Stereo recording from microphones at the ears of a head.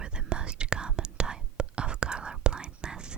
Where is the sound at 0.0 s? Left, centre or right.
Right.